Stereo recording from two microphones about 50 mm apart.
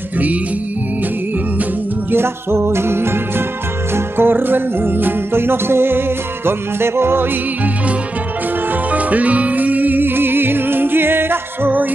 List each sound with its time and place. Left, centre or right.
2.0 s music: right
8.9 s music: right